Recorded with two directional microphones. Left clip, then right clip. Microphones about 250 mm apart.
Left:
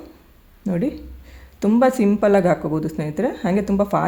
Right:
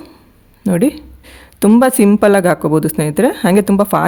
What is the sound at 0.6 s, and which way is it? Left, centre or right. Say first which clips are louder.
Speech: right 9 dB; right.